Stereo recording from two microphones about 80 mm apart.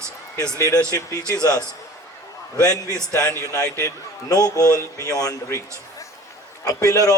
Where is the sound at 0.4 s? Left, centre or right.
Right.